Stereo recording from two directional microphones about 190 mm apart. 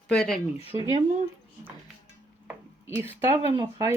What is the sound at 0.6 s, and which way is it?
Speech, 30° left (ahead or behind).